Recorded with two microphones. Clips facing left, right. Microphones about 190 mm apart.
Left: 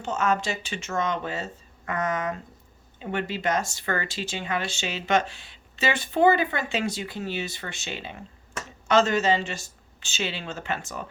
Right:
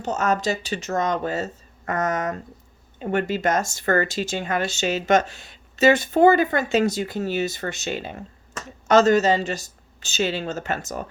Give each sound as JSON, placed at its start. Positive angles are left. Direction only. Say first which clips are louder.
{"t": 0.0, "sound": "speech", "louder": "right 3 dB", "side_deg": -40}